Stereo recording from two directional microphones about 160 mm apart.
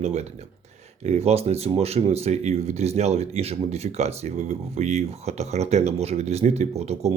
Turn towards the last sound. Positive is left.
turn(degrees=-40)  # may be behind; listen again after turning